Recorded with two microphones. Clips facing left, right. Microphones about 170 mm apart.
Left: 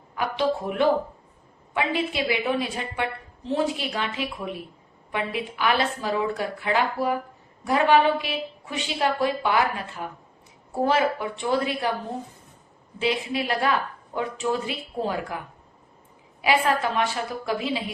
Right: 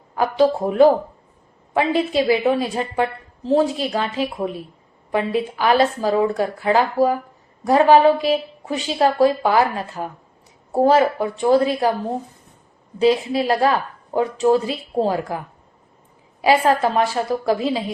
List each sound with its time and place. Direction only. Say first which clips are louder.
0.1 s a woman's voice: right 7 dB; 40° right (ahead or behind)
13.0 s a woman's voice: right 9 dB; 35° right (ahead or behind)
16.4 s a woman's voice: right 6 dB; 40° right (ahead or behind)